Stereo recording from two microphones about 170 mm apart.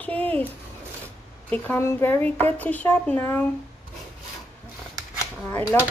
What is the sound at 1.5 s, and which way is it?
Speech, 10° left (ahead or behind).